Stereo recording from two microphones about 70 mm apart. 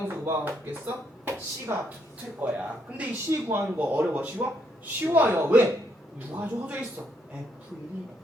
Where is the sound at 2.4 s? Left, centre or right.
Centre.